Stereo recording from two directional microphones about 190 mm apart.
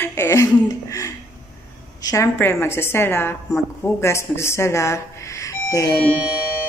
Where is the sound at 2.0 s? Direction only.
15° left (ahead or behind).